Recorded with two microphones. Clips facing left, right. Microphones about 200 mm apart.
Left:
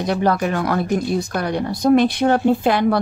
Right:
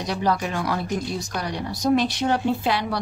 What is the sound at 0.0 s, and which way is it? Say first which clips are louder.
Speech: left 5 dB; 55° left (ahead or behind).